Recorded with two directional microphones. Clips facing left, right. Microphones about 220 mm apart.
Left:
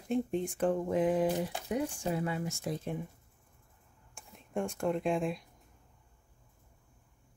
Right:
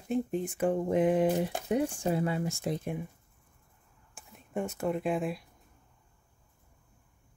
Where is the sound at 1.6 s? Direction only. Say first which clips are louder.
Right 5 dB; 30° right (ahead or behind).